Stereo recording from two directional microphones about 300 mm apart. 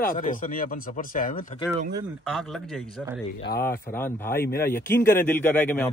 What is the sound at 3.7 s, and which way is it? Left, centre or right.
A man's voice, centre.